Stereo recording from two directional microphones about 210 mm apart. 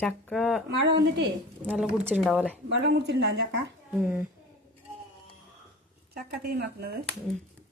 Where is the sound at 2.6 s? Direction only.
55° right (ahead or behind).